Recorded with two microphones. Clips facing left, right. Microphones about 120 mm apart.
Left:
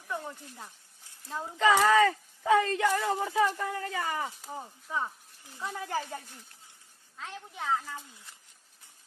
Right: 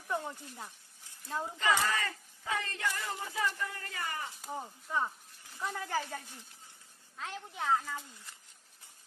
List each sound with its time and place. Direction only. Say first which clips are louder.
0.1 s a sound: right 1 dB; 20° right (ahead or behind)
1.5 s speech: left 10 dB; 90° left
4.4 s speech: even; centre (ahead or behind)
5.7 s speech: left 3 dB; 15° left (ahead or behind)
7.2 s speech: even; centre (ahead or behind)